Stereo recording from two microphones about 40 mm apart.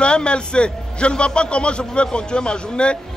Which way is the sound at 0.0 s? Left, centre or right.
Left.